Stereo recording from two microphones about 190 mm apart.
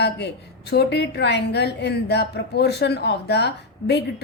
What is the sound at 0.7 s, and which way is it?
Speech, 60° left (ahead or behind).